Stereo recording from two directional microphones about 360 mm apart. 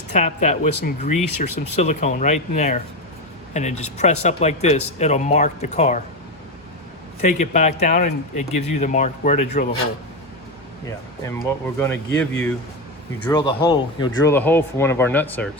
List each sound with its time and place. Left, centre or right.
0.1 s speech: centre
7.2 s speech: centre
10.8 s speech: centre